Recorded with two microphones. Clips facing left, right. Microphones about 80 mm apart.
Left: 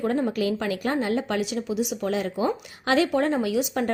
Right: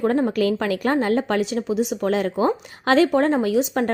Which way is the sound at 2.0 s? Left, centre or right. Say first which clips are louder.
Right 5 dB; right.